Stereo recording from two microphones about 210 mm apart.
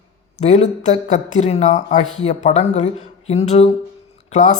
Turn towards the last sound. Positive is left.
turn(degrees=35)  # may be behind; listen again after turning